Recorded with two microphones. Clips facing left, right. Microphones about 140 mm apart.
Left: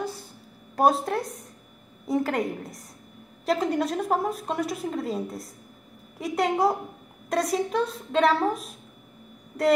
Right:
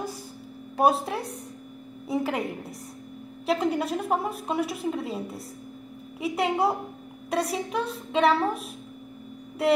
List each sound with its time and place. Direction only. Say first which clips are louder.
0.7 s a woman's voice: left 1 dB; 5° right (ahead or behind)